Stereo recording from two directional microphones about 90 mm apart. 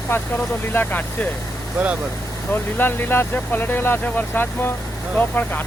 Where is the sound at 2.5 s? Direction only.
20° left (ahead or behind).